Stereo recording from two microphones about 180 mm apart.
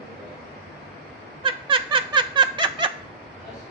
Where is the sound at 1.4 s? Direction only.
30° right (ahead or behind).